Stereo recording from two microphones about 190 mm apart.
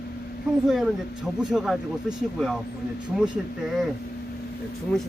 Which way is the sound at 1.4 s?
5° right (ahead or behind).